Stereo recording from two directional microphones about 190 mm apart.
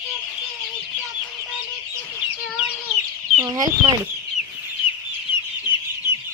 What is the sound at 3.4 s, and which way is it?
Speech, 20° right (ahead or behind).